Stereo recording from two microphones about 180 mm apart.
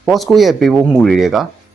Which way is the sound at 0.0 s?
Centre (ahead or behind).